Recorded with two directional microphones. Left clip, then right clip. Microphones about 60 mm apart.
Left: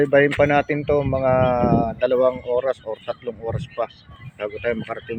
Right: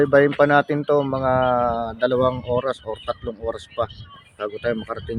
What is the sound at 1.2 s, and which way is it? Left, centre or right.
Speech, centre.